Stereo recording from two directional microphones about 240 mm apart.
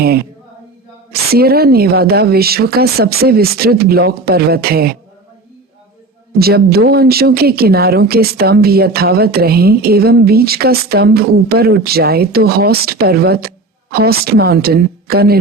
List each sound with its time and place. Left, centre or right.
0.0 s speech: right
6.4 s speech: right